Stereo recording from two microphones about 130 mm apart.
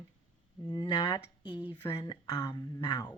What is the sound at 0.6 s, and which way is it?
Speech, 35° left (ahead or behind).